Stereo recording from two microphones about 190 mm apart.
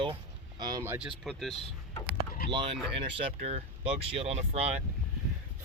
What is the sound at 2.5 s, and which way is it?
Speech, 25° right (ahead or behind).